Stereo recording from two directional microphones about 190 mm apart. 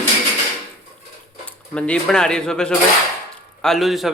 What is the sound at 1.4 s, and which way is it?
A man's voice, 5° left (ahead or behind).